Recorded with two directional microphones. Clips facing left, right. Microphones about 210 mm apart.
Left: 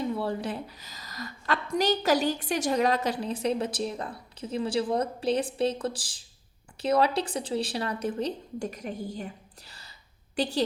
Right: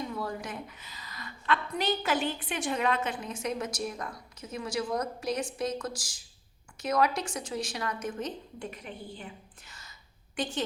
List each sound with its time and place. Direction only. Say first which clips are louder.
0.1 s a woman's voice: left 6 dB; 30° left (ahead or behind)